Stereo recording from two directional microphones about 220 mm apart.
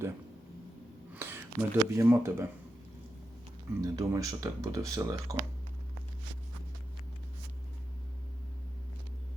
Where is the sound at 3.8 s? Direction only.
15° right (ahead or behind).